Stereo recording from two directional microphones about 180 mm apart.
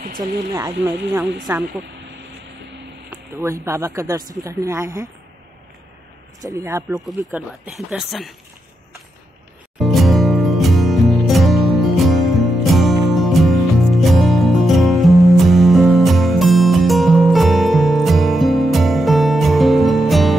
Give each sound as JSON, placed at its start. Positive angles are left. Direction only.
{"t": 0.5, "sound": "speech", "side_deg": -20}
{"t": 3.1, "sound": "speech", "side_deg": -15}
{"t": 6.4, "sound": "speech", "side_deg": -15}
{"t": 7.2, "sound": "speech", "side_deg": -5}
{"t": 9.8, "sound": "music", "side_deg": 0}